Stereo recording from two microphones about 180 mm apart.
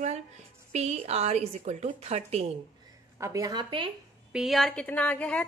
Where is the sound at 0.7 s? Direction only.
40° right (ahead or behind).